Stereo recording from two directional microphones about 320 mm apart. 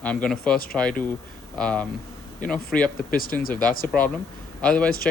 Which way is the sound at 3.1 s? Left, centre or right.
Left.